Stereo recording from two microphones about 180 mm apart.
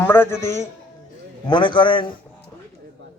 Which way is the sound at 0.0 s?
10° left (ahead or behind).